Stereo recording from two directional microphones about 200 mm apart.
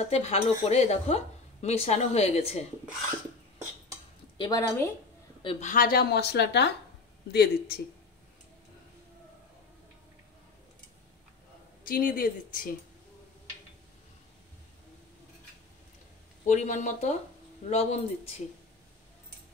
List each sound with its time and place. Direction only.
0.1 s a woman's voice: 30° left (ahead or behind)
4.4 s a woman's voice: 20° left (ahead or behind)
5.4 s a woman's voice: 25° left (ahead or behind)
5.7 s speech: 45° left (ahead or behind)
11.8 s speech: 45° left (ahead or behind)
16.4 s a woman's voice: 40° left (ahead or behind)